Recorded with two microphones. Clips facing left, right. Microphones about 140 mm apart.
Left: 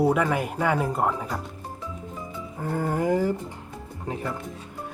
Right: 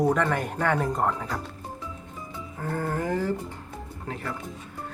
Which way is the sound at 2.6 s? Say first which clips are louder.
Left 3 dB; 15° left (ahead or behind).